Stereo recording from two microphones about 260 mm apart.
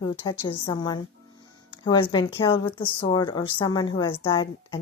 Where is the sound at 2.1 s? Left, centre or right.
Centre.